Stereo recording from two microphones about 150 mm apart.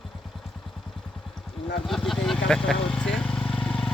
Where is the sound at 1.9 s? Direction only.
Centre (ahead or behind).